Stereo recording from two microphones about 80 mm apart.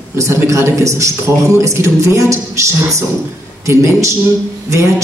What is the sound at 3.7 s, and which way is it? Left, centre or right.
Speech, right.